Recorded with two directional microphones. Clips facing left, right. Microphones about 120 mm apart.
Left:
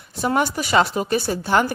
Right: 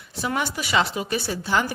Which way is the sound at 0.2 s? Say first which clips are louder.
Left 6 dB; 45° left (ahead or behind).